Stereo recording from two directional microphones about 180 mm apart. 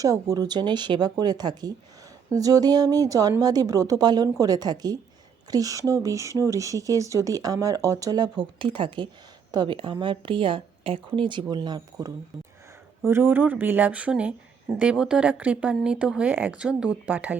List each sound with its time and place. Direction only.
0.0 s speech: 20° right (ahead or behind)